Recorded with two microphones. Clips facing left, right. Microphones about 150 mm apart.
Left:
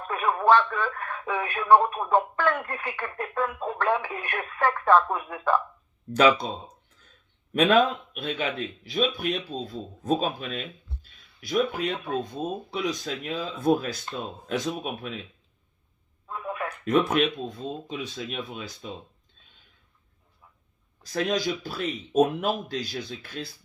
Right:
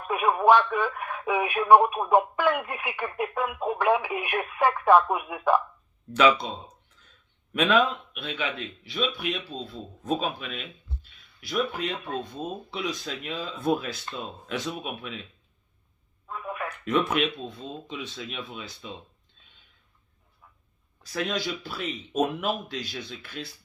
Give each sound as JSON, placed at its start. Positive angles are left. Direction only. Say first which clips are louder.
{"t": 0.1, "sound": "speech", "louder": "right 1 dB", "side_deg": -10}
{"t": 6.1, "sound": "speech", "louder": "left 1 dB", "side_deg": 40}
{"t": 7.5, "sound": "speech", "louder": "left 2 dB", "side_deg": 40}
{"t": 16.8, "sound": "speech", "louder": "left 3 dB", "side_deg": 40}
{"t": 21.0, "sound": "speech", "louder": "left 3 dB", "side_deg": 40}